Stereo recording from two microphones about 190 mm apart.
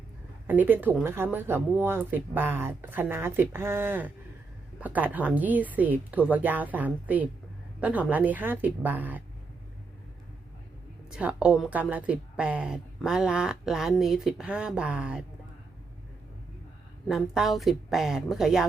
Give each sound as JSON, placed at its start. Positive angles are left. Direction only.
{"t": 0.4, "sound": "speech", "side_deg": -10}
{"t": 11.1, "sound": "speech", "side_deg": -5}
{"t": 17.1, "sound": "speech", "side_deg": 0}